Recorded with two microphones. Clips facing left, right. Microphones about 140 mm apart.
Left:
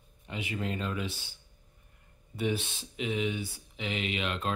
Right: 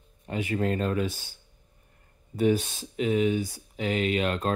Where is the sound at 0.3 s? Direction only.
45° right (ahead or behind).